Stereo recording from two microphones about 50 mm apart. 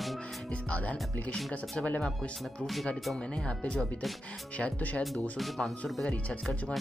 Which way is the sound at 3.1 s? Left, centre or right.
Left.